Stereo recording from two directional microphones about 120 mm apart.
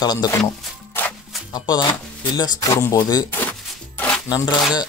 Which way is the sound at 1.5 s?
35° left (ahead or behind).